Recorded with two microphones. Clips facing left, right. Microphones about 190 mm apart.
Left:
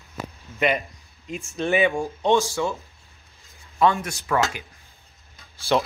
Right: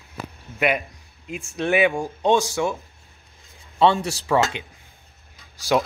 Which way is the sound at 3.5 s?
30° right (ahead or behind).